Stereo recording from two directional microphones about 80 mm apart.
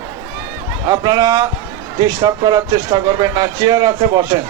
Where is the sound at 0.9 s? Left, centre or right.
Right.